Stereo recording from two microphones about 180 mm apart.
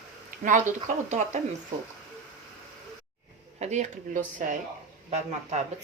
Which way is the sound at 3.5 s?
40° right (ahead or behind).